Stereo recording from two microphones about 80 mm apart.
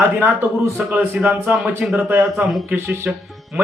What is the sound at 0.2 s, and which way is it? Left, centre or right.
A man's voice, right.